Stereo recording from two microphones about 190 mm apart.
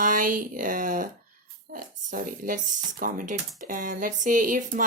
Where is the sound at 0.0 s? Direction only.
45° right (ahead or behind).